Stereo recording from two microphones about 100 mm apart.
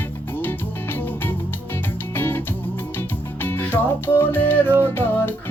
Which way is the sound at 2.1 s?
20° left (ahead or behind).